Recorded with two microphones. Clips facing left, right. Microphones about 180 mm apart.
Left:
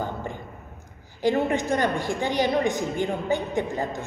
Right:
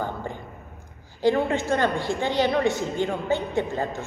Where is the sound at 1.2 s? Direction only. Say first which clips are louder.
Right 1 dB; 15° left (ahead or behind).